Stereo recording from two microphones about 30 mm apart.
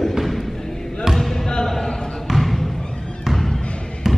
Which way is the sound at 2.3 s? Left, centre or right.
Centre.